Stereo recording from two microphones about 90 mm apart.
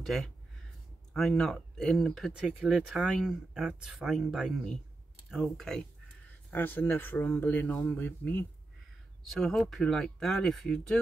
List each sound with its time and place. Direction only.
0.0 s speech: centre (ahead or behind)
2.3 s speech: 15° right (ahead or behind)
3.0 s speech: centre (ahead or behind)
6.5 s speech: 20° left (ahead or behind)
9.3 s speech: centre (ahead or behind)